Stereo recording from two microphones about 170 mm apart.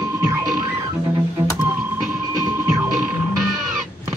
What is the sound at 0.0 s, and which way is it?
Music, 20° right (ahead or behind).